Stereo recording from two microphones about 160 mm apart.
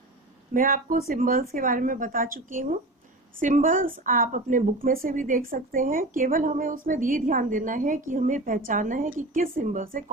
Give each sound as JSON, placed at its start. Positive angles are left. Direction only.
{"t": 0.5, "sound": "a woman's voice", "side_deg": -60}